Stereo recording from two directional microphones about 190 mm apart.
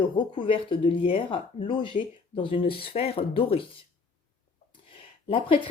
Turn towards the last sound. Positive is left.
turn(degrees=30)  # may be behind; listen again after turning